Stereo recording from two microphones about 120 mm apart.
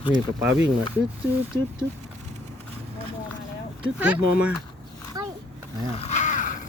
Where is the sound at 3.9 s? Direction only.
10° right (ahead or behind).